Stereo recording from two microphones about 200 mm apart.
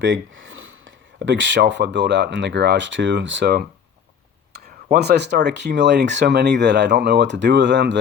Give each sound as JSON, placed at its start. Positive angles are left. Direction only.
{"t": 0.0, "sound": "speech", "side_deg": -70}